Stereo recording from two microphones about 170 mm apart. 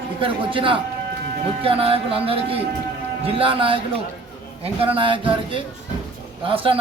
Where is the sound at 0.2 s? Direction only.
30° right (ahead or behind).